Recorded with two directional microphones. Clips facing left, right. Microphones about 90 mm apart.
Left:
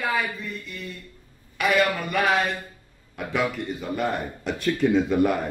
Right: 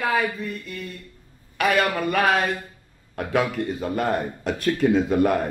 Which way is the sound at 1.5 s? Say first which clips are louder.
Right 1 dB; 45° right (ahead or behind).